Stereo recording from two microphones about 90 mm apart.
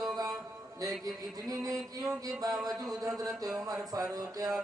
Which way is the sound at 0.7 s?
45° right (ahead or behind).